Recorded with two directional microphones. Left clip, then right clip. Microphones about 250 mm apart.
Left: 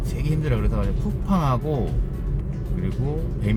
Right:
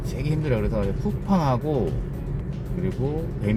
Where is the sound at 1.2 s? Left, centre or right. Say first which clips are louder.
Even; centre.